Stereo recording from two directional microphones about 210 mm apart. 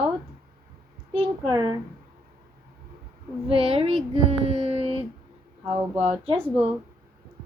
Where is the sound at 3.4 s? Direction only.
30° right (ahead or behind).